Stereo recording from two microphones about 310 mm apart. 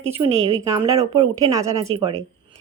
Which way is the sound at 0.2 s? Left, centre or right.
Centre.